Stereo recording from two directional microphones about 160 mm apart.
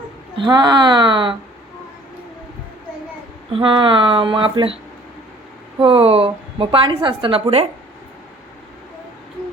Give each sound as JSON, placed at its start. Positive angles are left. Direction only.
{"t": 0.3, "sound": "speech", "side_deg": -30}
{"t": 3.5, "sound": "a woman's voice", "side_deg": -30}
{"t": 5.8, "sound": "a woman's voice", "side_deg": -35}